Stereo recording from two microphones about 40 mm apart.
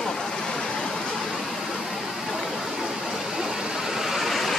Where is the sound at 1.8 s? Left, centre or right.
Centre.